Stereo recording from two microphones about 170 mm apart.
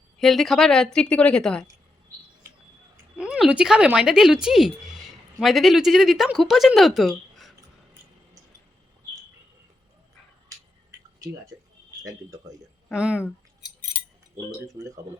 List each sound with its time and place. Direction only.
0.2 s speech: centre (ahead or behind)
3.2 s speech: 5° right (ahead or behind)
11.5 s a sound: 20° right (ahead or behind)
12.0 s speech: 20° right (ahead or behind)
12.9 s speech: 5° right (ahead or behind)
14.7 s speech: 20° right (ahead or behind)